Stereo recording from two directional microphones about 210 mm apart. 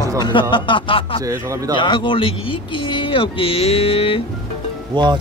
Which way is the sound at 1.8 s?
20° left (ahead or behind).